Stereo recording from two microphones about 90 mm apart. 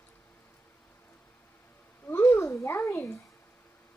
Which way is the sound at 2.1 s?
25° left (ahead or behind).